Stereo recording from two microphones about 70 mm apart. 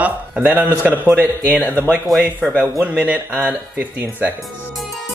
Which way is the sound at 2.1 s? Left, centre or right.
Centre.